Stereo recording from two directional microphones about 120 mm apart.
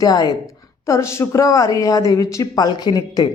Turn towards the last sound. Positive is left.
turn(degrees=35)  # may be behind; listen again after turning